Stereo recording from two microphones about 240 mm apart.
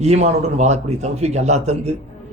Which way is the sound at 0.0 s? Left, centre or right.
Right.